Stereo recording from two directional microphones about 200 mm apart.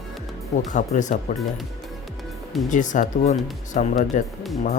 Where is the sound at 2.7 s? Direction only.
40° left (ahead or behind).